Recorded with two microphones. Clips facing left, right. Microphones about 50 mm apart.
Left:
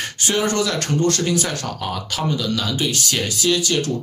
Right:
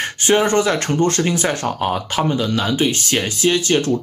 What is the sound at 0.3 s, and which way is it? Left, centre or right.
Speech, right.